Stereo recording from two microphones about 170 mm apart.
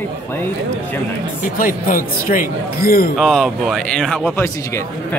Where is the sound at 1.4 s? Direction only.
55° left (ahead or behind).